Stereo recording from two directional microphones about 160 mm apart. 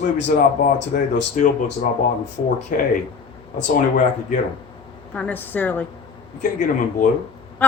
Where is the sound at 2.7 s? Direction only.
55° left (ahead or behind).